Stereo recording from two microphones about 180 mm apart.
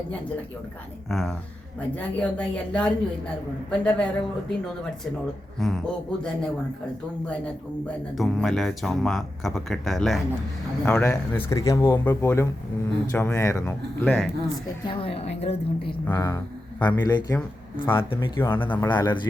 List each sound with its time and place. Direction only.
1.1 s speech: centre (ahead or behind)
5.5 s speech: centre (ahead or behind)
8.1 s speech: centre (ahead or behind)
10.8 s speech: 10° left (ahead or behind)
14.8 s a woman's voice: 30° left (ahead or behind)
16.0 s speech: 15° left (ahead or behind)
18.5 s speech: 10° left (ahead or behind)
18.9 s speech: 25° left (ahead or behind)